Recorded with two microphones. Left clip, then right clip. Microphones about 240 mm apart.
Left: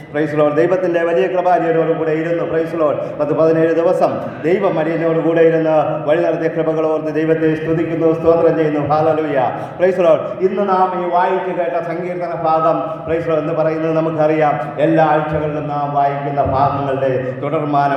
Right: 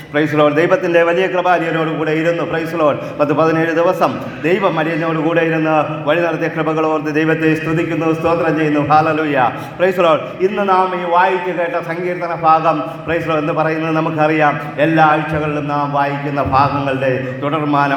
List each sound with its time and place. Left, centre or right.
0.2 s a man's voice: right
12.5 s a man's voice: right
16.5 s a man's voice: right